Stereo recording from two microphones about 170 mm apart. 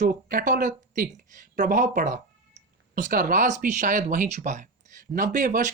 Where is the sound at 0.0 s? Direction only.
55° right (ahead or behind).